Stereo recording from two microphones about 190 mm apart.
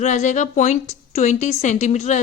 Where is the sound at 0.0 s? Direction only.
40° left (ahead or behind).